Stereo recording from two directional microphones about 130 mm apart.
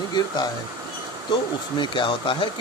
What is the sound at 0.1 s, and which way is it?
Speech, 35° left (ahead or behind).